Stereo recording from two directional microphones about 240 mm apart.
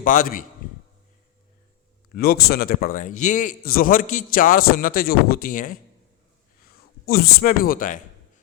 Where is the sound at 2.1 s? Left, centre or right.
Left.